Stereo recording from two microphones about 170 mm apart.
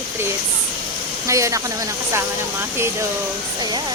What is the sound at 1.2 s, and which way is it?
Speech, 20° right (ahead or behind).